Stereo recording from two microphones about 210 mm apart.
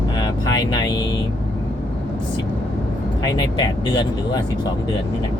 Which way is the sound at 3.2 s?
20° left (ahead or behind).